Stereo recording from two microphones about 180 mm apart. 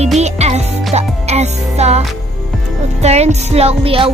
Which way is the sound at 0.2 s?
40° right (ahead or behind).